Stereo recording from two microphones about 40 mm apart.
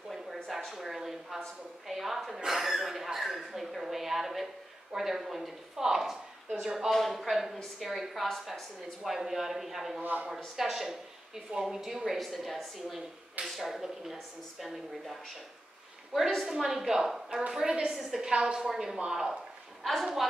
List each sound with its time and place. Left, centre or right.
0.1 s a sound: centre
1.9 s speech: centre
6.9 s speech: centre
19.8 s a woman's voice: centre